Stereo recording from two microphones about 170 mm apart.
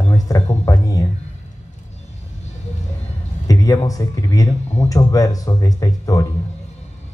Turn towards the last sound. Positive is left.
turn(degrees=20)  # may be behind; listen again after turning